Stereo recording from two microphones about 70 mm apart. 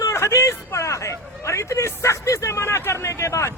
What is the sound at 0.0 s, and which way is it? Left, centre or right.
Speech, left.